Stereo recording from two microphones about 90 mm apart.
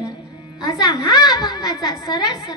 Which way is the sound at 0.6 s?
50° left (ahead or behind).